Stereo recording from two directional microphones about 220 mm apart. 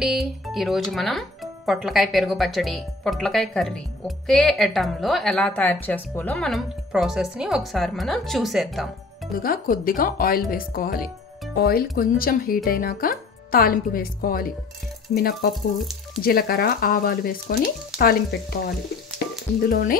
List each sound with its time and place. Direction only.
0.0 s a woman's voice: centre (ahead or behind)
9.4 s speech: 40° left (ahead or behind)
15.5 s a woman's voice: centre (ahead or behind)
16.2 s speech: 45° left (ahead or behind)